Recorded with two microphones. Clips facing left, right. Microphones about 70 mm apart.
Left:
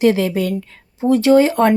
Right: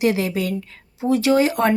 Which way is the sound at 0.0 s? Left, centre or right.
Left.